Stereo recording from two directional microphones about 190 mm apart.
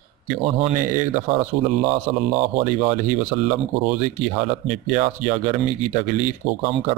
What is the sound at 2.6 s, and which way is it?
Speech, 45° right (ahead or behind).